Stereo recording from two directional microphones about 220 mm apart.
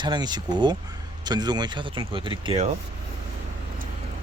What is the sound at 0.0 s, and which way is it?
Speech, 20° right (ahead or behind).